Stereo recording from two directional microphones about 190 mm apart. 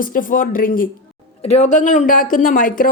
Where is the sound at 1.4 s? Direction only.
35° left (ahead or behind).